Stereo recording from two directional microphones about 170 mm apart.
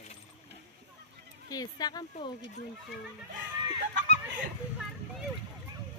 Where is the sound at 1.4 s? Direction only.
25° left (ahead or behind).